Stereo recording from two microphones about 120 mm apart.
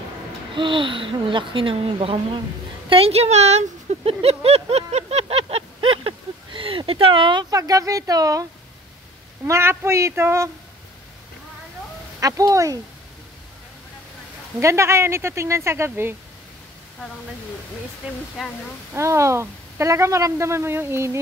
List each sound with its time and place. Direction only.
0.6 s a woman's voice: 45° right (ahead or behind); by 10.5 s 20° right (ahead or behind)
12.2 s a woman's voice: 30° right (ahead or behind)
14.6 s a woman's voice: 25° right (ahead or behind)
18.4 s speech: 5° right (ahead or behind)
18.9 s a woman's voice: 25° right (ahead or behind)